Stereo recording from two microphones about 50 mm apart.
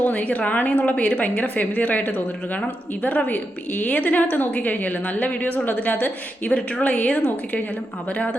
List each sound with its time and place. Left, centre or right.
0.0 s a woman's voice: left